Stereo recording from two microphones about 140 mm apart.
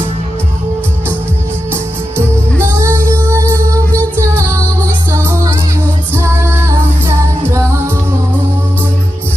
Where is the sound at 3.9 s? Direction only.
10° left (ahead or behind).